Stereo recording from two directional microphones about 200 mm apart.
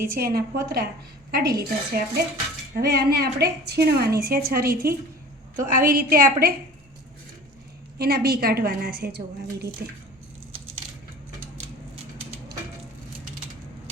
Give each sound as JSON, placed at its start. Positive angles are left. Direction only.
{"t": 0.1, "sound": "a woman's voice", "side_deg": -50}
{"t": 7.9, "sound": "a woman's voice", "side_deg": -50}